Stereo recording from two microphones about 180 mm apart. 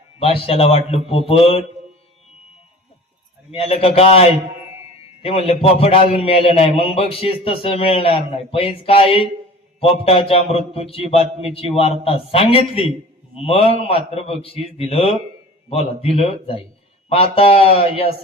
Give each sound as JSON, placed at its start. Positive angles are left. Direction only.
{"t": 0.2, "sound": "a man's voice", "side_deg": 30}
{"t": 3.5, "sound": "a man's voice", "side_deg": 35}